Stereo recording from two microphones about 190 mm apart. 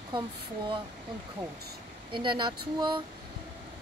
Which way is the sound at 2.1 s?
25° right (ahead or behind).